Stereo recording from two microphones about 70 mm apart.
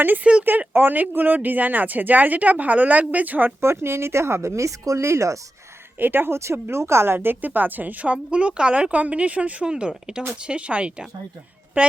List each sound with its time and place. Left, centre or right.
0.4 s speech: right
3.6 s speech: right
6.0 s speech: right